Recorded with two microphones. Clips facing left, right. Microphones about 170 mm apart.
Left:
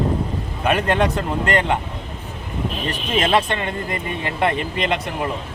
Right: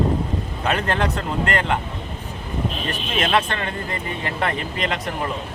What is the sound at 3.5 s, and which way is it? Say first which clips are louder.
Speech: left 3 dB; 20° left (ahead or behind).